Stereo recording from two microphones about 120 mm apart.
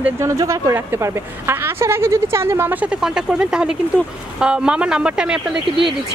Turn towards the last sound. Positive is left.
turn(degrees=-5)  # may be behind; listen again after turning